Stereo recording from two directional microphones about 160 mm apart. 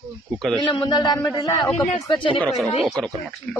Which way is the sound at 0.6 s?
25° left (ahead or behind).